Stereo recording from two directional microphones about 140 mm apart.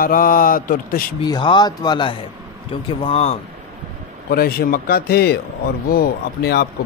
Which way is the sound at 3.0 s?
50° left (ahead or behind).